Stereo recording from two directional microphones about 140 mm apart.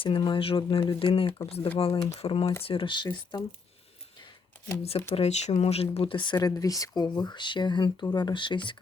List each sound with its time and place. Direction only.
0.0 s speech: 35° left (ahead or behind)
4.8 s speech: 45° left (ahead or behind)